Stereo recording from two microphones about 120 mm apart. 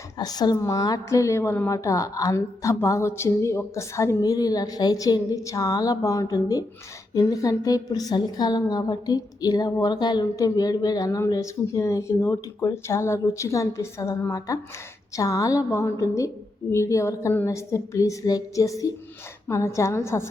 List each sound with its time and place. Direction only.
0.2 s a woman's voice: 35° left (ahead or behind)